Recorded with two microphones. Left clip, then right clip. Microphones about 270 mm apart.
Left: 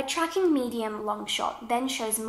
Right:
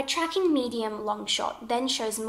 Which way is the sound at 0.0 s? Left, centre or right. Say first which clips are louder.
Even; centre.